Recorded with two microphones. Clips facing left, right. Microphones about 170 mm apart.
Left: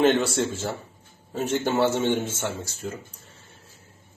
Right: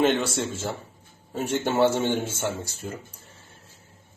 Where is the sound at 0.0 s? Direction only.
Centre (ahead or behind).